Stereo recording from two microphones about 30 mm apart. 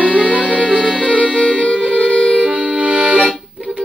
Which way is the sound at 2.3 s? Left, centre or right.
Right.